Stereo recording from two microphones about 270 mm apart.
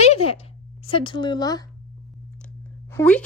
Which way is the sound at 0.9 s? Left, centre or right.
Centre.